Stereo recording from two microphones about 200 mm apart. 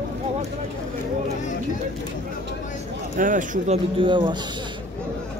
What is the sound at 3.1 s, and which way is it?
Speech, 40° right (ahead or behind).